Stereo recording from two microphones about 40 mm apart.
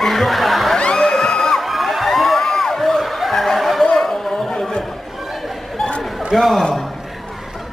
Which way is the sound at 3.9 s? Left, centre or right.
Centre.